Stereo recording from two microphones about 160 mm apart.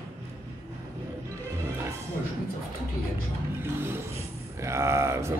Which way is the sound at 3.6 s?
15° right (ahead or behind).